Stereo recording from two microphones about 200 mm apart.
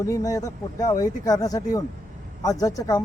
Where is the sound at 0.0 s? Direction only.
15° left (ahead or behind).